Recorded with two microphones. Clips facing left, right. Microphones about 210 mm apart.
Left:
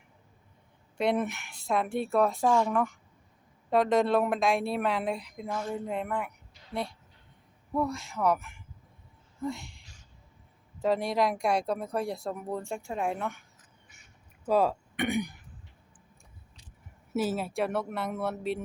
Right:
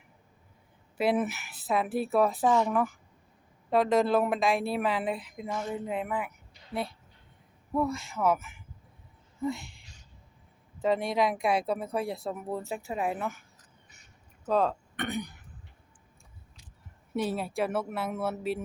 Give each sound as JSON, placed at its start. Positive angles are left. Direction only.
{"t": 0.9, "sound": "speech", "side_deg": -5}
{"t": 7.7, "sound": "speech", "side_deg": 0}
{"t": 14.4, "sound": "speech", "side_deg": 10}
{"t": 17.2, "sound": "speech", "side_deg": 0}